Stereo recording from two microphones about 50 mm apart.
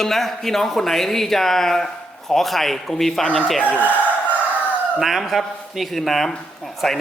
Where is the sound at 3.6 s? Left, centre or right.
Left.